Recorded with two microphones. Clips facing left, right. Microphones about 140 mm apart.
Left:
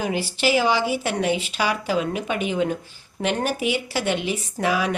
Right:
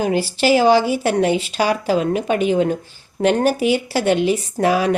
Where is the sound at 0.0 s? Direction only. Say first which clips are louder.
Right 5 dB; 35° right (ahead or behind).